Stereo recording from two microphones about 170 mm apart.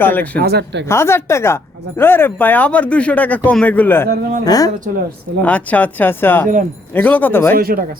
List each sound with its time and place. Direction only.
0.0 s speech: 10° left (ahead or behind)
0.4 s speech: 80° right
0.9 s speech: 15° left (ahead or behind)
4.1 s speech: 55° right (ahead or behind)
4.4 s a woman's voice: 20° left (ahead or behind)
5.4 s speech: 10° left (ahead or behind)
7.5 s speech: 60° right (ahead or behind)